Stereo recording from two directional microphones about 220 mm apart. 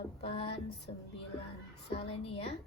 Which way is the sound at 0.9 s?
25° left (ahead or behind).